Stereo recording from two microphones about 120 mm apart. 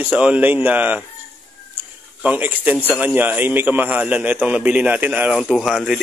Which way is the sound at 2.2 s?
15° right (ahead or behind).